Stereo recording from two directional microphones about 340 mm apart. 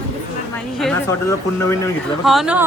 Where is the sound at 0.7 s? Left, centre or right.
Centre.